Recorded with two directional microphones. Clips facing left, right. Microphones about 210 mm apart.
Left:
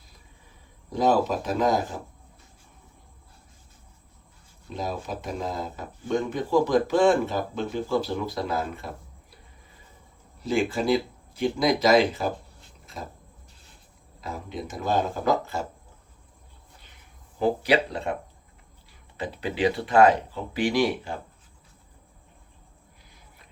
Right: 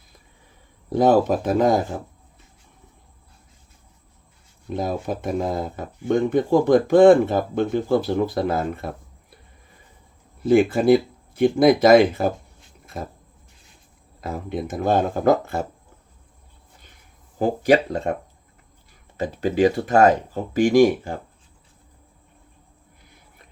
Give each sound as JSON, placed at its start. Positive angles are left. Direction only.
{"t": 0.9, "sound": "speech", "side_deg": -50}
{"t": 4.7, "sound": "speech", "side_deg": -50}
{"t": 10.4, "sound": "speech", "side_deg": -50}
{"t": 12.8, "sound": "a sound", "side_deg": -50}
{"t": 14.2, "sound": "speech", "side_deg": -55}
{"t": 17.4, "sound": "speech", "side_deg": -45}